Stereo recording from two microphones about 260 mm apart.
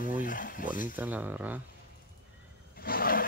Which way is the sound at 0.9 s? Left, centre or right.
Centre.